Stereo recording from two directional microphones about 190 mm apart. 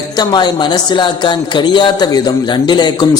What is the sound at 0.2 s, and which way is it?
A man's voice, 20° left (ahead or behind).